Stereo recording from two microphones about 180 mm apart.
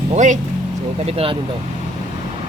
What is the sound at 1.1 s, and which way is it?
Speech, 35° right (ahead or behind).